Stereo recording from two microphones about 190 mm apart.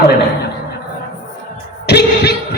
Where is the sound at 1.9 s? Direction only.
60° left (ahead or behind).